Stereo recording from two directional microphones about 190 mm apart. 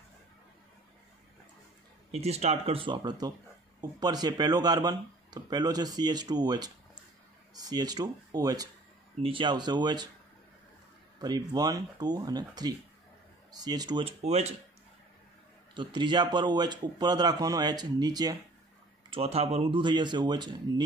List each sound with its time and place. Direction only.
2.0 s speech: 35° right (ahead or behind)
11.1 s speech: 20° right (ahead or behind)
15.7 s speech: 25° right (ahead or behind)
19.0 s speech: 30° right (ahead or behind)